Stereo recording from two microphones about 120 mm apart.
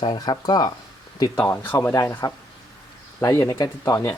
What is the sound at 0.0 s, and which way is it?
Speech, 35° left (ahead or behind).